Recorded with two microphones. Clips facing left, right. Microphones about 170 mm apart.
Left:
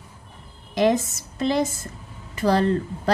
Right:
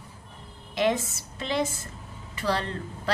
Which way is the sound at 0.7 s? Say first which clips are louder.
Left 5 dB; 40° left (ahead or behind).